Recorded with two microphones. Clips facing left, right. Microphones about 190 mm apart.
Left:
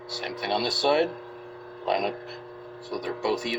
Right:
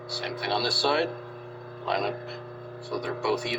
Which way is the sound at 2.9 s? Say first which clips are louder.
Even; 20° left (ahead or behind).